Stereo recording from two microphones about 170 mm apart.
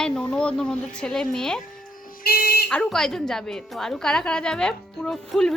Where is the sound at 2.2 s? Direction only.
60° left (ahead or behind).